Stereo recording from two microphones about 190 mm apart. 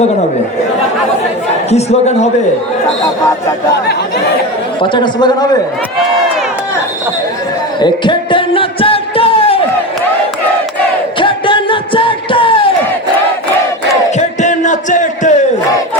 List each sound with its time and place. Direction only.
1.7 s a man's voice: 35° left (ahead or behind)
4.8 s speech: 25° left (ahead or behind)
7.8 s music: 25° left (ahead or behind)
11.2 s music: 25° left (ahead or behind)
14.2 s music: 40° left (ahead or behind)